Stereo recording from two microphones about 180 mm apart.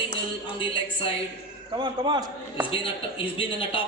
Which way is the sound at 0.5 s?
25° left (ahead or behind).